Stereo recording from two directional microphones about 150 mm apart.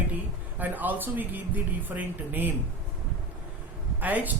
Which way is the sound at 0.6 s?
10° right (ahead or behind).